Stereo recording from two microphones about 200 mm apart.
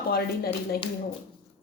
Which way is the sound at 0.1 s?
50° left (ahead or behind).